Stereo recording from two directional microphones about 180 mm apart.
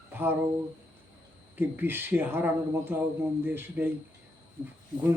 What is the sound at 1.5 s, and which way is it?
Speech, 10° right (ahead or behind).